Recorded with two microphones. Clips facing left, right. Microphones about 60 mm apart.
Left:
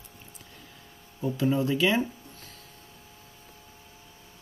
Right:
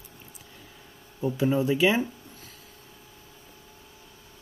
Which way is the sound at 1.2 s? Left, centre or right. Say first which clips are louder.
Right 2 dB; centre.